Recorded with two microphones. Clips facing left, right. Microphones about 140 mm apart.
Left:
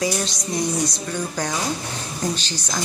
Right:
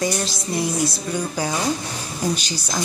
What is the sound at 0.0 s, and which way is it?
Speech, centre (ahead or behind).